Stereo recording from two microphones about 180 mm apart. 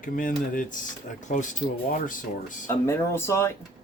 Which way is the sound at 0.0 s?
50° left (ahead or behind).